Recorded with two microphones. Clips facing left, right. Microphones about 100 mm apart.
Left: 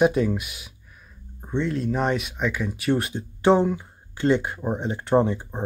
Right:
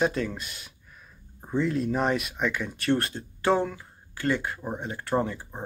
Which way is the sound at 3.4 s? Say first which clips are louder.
Left 6 dB; 20° left (ahead or behind).